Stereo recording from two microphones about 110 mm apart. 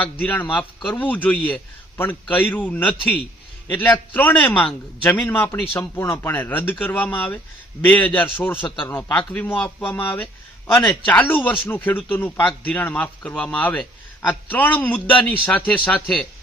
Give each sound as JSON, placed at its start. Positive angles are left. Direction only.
{"t": 0.0, "sound": "speech", "side_deg": 15}